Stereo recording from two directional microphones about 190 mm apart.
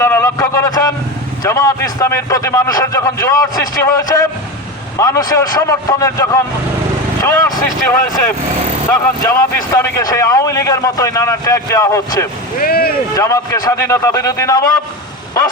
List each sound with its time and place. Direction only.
0.0 s a man's voice: 15° left (ahead or behind)
8.9 s a man's voice: 15° left (ahead or behind)
12.5 s speech: 50° left (ahead or behind)
13.1 s a man's voice: 15° left (ahead or behind)